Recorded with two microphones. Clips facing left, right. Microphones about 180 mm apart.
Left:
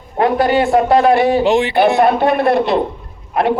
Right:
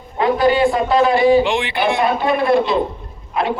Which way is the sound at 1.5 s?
40° left (ahead or behind).